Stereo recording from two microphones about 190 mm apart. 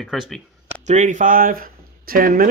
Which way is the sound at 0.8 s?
40° right (ahead or behind).